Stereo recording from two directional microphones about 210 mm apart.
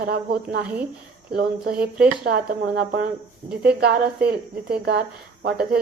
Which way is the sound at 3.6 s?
50° right (ahead or behind).